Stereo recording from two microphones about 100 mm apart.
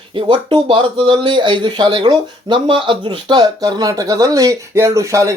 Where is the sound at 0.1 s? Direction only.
55° right (ahead or behind).